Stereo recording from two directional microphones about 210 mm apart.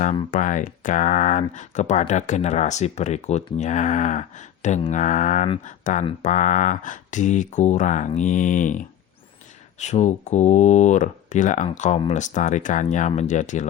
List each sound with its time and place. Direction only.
0.3 s speech: 35° left (ahead or behind)